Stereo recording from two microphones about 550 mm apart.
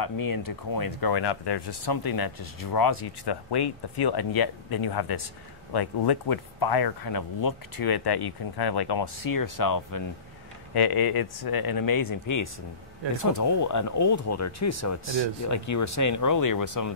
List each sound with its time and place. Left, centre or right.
0.0 s speech: left